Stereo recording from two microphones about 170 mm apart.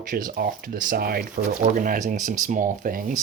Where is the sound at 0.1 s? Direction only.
55° right (ahead or behind).